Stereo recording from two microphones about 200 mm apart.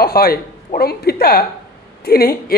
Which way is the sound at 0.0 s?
50° left (ahead or behind).